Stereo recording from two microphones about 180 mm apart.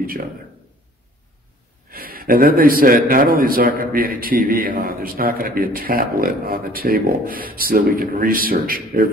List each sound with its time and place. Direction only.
1.9 s a man's voice: 55° right (ahead or behind)